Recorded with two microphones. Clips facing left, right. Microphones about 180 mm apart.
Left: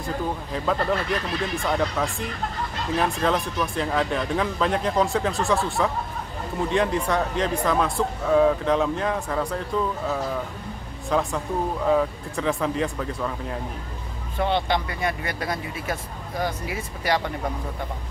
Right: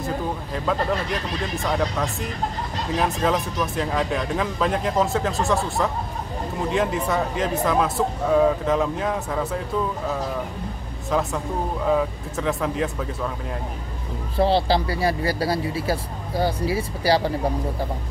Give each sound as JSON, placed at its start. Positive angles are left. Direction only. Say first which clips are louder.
{"t": 0.5, "sound": "speech", "louder": "even", "side_deg": 0}
{"t": 14.3, "sound": "speech", "louder": "right 4 dB", "side_deg": -35}